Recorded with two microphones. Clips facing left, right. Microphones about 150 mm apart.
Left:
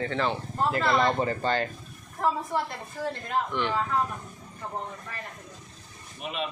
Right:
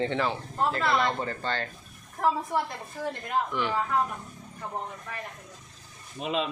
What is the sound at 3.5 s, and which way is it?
Speech, 5° right (ahead or behind).